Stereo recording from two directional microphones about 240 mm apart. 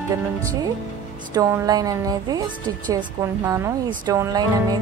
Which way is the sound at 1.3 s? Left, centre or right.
Centre.